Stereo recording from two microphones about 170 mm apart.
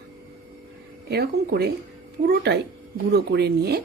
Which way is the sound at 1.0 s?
70° right (ahead or behind).